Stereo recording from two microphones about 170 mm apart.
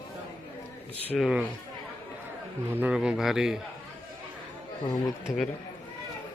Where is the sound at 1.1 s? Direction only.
5° right (ahead or behind).